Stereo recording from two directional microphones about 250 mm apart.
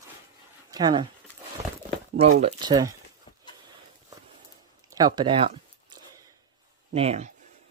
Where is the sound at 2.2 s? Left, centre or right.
Right.